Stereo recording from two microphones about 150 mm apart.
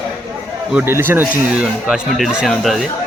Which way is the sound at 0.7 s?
10° right (ahead or behind).